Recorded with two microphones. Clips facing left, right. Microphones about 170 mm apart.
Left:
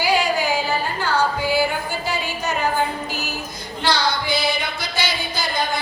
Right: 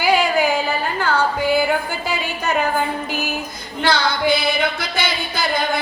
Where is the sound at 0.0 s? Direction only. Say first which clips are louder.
Right 3 dB; 55° right (ahead or behind).